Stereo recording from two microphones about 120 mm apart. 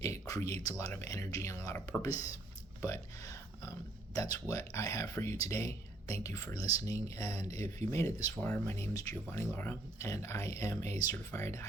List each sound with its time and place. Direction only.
0.0 s speech: 25° left (ahead or behind)